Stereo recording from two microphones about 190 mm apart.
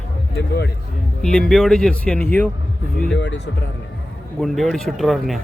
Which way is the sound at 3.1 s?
70° left (ahead or behind).